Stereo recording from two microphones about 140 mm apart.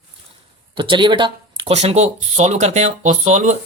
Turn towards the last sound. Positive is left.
turn(degrees=-60)  # may be behind; listen again after turning